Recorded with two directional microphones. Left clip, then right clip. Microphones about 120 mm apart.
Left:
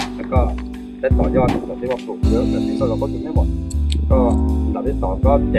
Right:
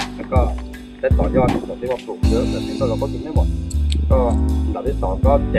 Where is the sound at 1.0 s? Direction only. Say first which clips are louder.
Even; centre (ahead or behind).